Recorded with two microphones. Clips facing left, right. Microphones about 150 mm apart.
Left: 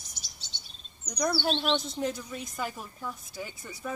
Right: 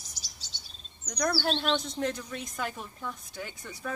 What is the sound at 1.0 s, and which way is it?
Speech, 5° left (ahead or behind).